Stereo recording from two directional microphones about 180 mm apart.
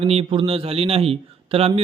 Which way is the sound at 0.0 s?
30° right (ahead or behind).